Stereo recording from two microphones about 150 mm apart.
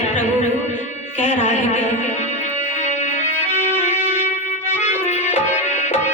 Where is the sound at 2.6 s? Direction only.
55° left (ahead or behind).